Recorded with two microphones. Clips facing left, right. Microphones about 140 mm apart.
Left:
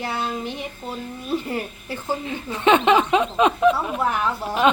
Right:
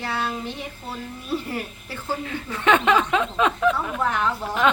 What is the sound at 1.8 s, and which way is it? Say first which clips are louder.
Speech: left 3 dB; 15° left (ahead or behind).